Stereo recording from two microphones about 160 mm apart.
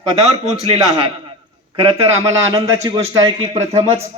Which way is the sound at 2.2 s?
20° right (ahead or behind).